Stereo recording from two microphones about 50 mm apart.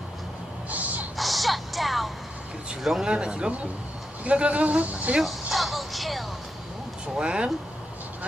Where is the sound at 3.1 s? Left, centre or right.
Centre.